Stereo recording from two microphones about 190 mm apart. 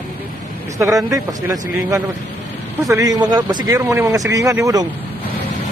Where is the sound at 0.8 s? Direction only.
15° right (ahead or behind).